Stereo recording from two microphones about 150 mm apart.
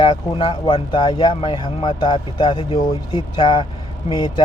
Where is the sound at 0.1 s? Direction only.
40° left (ahead or behind).